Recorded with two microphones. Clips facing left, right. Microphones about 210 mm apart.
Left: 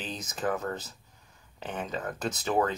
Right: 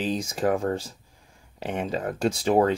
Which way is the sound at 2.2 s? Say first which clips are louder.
Right 8 dB; 10° right (ahead or behind).